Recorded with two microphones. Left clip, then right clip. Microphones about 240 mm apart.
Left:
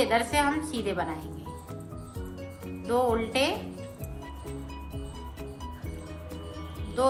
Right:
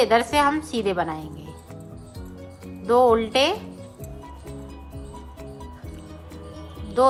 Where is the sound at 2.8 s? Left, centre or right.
Right.